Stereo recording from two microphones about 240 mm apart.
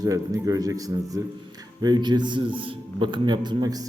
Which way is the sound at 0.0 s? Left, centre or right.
Centre.